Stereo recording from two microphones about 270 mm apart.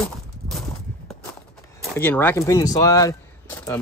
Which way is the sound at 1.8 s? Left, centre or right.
Centre.